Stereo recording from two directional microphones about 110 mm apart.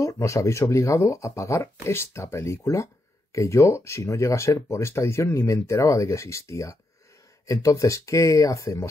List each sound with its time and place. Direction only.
0.0 s speech: 30° left (ahead or behind)